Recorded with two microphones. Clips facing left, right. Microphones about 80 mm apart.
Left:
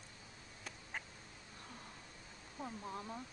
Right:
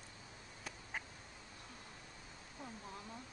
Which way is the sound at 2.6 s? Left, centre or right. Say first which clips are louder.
Left 5 dB; left.